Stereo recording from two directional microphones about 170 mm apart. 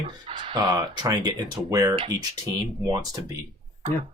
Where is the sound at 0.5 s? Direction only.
20° right (ahead or behind).